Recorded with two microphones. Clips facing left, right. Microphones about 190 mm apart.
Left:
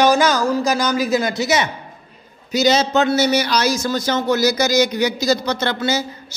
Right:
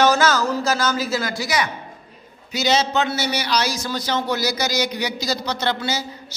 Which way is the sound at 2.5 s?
40° left (ahead or behind).